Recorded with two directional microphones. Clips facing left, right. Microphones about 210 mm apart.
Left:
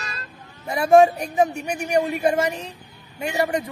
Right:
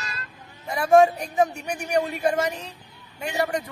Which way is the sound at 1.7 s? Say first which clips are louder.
Left 3 dB; 10° left (ahead or behind).